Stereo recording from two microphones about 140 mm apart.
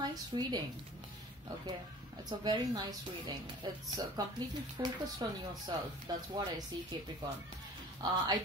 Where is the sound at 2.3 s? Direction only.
30° right (ahead or behind).